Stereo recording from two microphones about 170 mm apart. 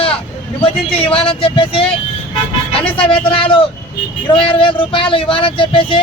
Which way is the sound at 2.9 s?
35° left (ahead or behind).